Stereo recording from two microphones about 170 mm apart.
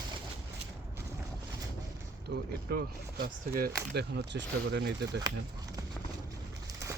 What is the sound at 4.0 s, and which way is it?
Speech, 85° right.